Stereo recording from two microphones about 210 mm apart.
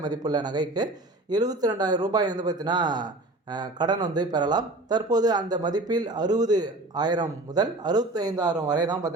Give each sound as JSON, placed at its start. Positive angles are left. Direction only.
{"t": 0.0, "sound": "a man's voice", "side_deg": -20}